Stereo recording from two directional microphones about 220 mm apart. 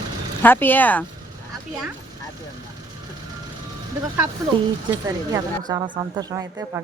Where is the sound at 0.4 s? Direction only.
10° left (ahead or behind).